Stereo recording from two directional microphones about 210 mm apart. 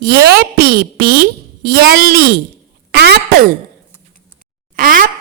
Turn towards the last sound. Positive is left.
turn(degrees=-40)  # may be behind; listen again after turning